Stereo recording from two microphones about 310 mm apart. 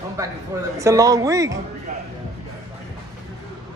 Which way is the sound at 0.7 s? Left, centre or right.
Centre.